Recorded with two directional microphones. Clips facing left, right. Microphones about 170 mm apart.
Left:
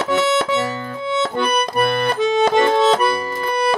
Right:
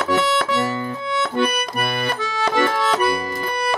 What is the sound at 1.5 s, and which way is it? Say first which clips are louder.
Accordion: left 6 dB; 25° left (ahead or behind).